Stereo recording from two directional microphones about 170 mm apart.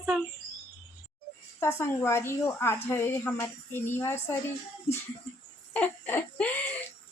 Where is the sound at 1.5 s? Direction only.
15° left (ahead or behind).